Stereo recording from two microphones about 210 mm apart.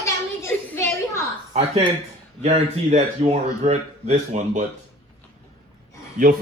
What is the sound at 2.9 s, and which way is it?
Speech, 30° right (ahead or behind).